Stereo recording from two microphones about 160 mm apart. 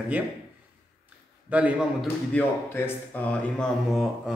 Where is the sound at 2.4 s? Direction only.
10° left (ahead or behind).